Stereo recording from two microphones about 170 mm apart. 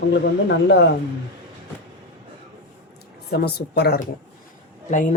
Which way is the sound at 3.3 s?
75° left (ahead or behind).